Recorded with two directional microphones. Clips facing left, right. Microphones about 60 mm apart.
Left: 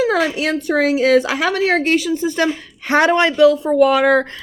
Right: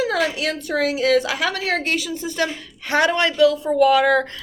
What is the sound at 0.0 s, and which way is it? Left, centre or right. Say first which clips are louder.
A woman's voice: left 4 dB; left.